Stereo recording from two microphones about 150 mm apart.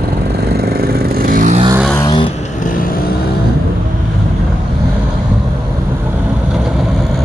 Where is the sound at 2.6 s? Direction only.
60° left (ahead or behind).